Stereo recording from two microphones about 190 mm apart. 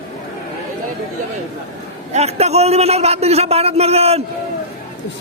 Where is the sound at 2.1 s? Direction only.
35° right (ahead or behind).